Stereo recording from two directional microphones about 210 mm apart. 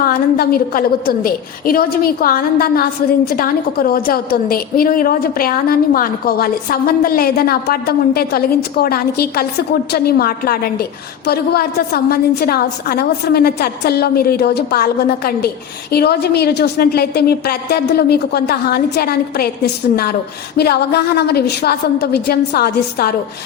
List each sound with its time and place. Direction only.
0.0 s a woman's voice: 45° left (ahead or behind)